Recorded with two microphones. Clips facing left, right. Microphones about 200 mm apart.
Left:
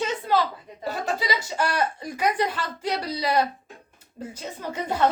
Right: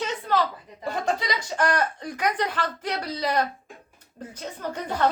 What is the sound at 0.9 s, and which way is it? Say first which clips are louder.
Speech: even; 5° left (ahead or behind).